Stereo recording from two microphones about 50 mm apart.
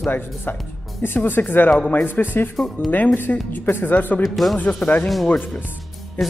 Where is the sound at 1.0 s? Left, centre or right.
Left.